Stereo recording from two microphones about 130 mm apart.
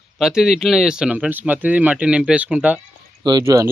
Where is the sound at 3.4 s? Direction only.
25° right (ahead or behind).